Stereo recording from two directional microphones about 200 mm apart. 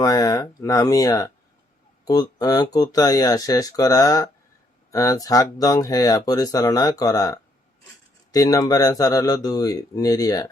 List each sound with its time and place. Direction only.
0.0 s speech: 15° left (ahead or behind)